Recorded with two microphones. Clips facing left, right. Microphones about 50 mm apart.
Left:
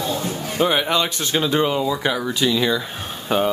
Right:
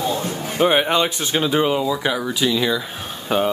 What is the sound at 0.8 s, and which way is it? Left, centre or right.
A man's voice, centre.